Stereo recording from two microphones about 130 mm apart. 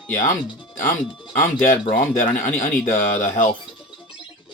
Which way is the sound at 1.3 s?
80° left.